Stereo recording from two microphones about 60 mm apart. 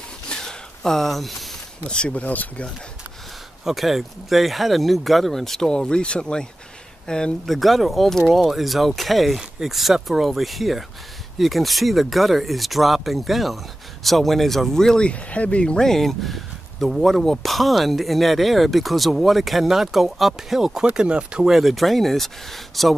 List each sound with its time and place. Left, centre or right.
0.3 s a sound: centre
1.9 s speech: centre
3.6 s speech: centre
7.4 s speech: centre
21.5 s speech: centre